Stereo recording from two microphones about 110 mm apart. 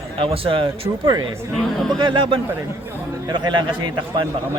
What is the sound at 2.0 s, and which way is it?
A man's voice, 50° right (ahead or behind).